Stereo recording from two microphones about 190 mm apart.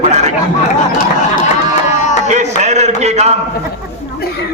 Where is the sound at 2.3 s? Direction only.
35° right (ahead or behind).